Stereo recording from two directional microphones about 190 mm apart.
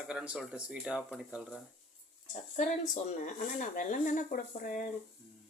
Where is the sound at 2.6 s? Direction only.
40° left (ahead or behind).